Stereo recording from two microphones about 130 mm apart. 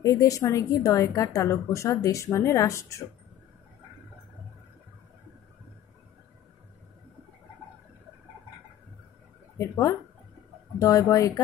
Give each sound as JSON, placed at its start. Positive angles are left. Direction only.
{"t": 0.0, "sound": "a woman's voice", "side_deg": 25}
{"t": 9.6, "sound": "a woman's voice", "side_deg": 20}